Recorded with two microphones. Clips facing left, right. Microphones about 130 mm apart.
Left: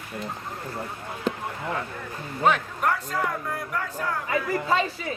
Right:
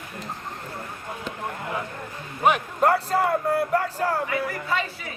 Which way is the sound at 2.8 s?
35° right (ahead or behind).